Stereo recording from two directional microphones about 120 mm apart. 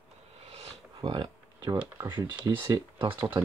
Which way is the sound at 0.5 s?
45° right (ahead or behind).